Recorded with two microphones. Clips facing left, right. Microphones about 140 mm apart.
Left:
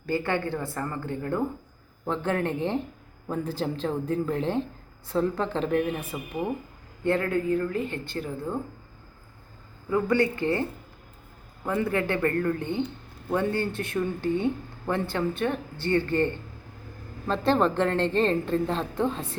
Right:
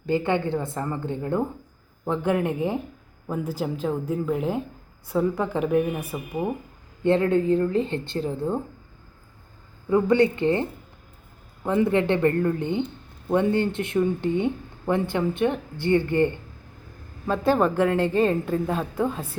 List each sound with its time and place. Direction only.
0.0 s speech: 20° right (ahead or behind)
7.0 s speech: 20° right (ahead or behind)
9.9 s speech: 20° right (ahead or behind)